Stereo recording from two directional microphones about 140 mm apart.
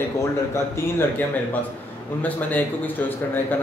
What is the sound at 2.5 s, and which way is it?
Speech, 15° left (ahead or behind).